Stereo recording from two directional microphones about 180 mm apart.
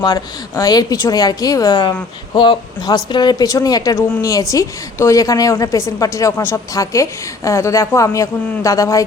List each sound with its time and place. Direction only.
0.0 s a woman's voice: 20° left (ahead or behind)